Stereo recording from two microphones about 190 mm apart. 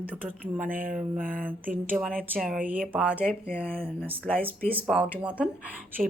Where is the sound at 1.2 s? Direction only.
45° right (ahead or behind).